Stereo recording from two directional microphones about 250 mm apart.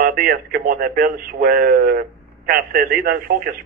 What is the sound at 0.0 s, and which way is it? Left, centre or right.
Speech, right.